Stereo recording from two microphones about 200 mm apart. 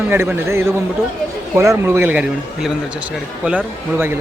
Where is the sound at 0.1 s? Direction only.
10° right (ahead or behind).